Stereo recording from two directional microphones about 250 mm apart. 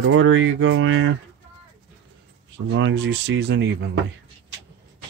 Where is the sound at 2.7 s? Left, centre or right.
Right.